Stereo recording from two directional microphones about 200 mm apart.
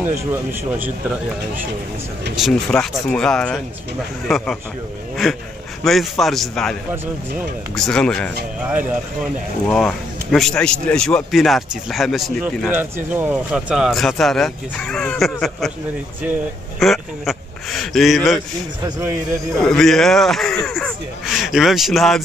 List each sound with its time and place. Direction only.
0.1 s speech: 10° right (ahead or behind)
2.3 s speech: centre (ahead or behind)
5.9 s speech: centre (ahead or behind)
9.7 s speech: centre (ahead or behind)
16.8 s speech: centre (ahead or behind)
18.8 s speech: 15° right (ahead or behind)
19.6 s speech: centre (ahead or behind)